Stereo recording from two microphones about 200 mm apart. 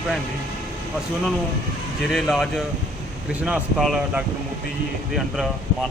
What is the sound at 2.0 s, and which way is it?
Speech, centre (ahead or behind).